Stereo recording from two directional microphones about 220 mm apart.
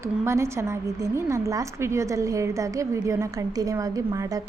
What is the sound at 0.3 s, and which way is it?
A woman's voice, 10° right (ahead or behind).